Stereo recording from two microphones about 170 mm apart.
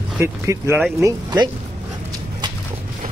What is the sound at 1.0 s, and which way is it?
Speech, 25° right (ahead or behind).